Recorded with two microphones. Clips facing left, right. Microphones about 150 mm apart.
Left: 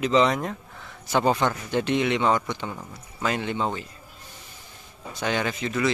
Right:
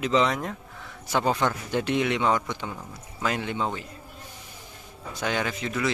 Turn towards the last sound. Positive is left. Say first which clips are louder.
# left 2 dB
turn(degrees=0)  # may be behind; listen again after turning